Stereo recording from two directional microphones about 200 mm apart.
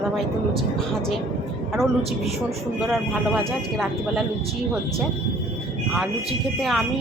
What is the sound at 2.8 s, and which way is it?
A woman's voice, centre (ahead or behind).